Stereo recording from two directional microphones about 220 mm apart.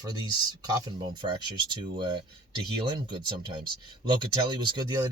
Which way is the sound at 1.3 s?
20° right (ahead or behind).